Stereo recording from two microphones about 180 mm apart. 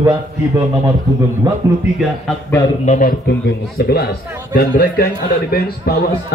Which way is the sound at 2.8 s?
45° left (ahead or behind).